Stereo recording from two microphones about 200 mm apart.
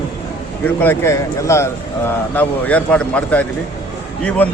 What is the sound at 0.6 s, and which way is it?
A man's voice, 10° left (ahead or behind).